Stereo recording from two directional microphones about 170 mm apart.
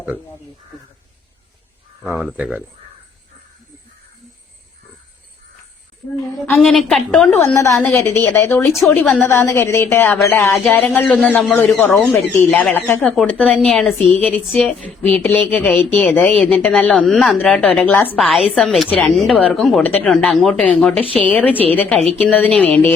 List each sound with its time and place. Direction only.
2.2 s speech: 10° right (ahead or behind)
6.3 s speech: 5° left (ahead or behind)
7.3 s speech: 15° left (ahead or behind)